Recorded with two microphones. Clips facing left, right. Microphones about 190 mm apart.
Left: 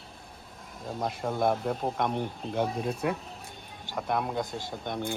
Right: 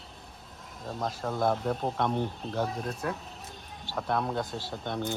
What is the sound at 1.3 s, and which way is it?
Speech, 15° left (ahead or behind).